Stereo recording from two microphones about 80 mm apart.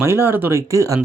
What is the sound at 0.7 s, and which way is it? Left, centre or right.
Speech, right.